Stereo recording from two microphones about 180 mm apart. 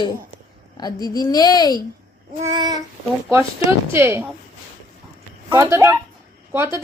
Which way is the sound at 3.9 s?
15° right (ahead or behind).